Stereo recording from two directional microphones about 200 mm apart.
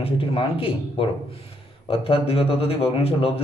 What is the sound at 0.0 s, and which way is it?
Speech, 30° left (ahead or behind).